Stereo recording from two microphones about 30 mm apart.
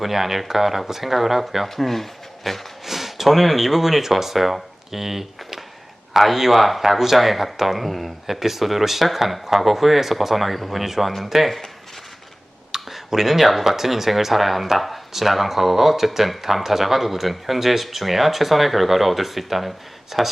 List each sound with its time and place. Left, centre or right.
0.0 s speech: centre
1.6 s speech: centre
2.8 s speech: centre
12.7 s a sound: centre
13.7 s speech: centre